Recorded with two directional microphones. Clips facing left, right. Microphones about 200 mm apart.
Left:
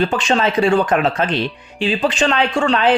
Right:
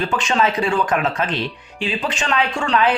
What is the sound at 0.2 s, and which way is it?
Speech, 30° left (ahead or behind).